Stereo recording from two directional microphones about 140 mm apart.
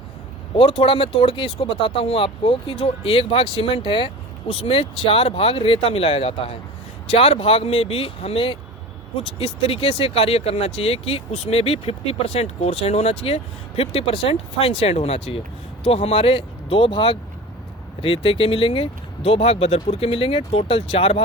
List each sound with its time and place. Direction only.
0.5 s speech: 40° left (ahead or behind)